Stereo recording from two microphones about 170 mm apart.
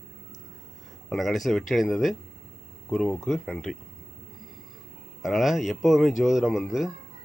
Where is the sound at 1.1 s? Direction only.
Centre (ahead or behind).